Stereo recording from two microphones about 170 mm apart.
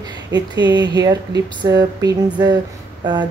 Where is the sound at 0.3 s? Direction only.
25° right (ahead or behind).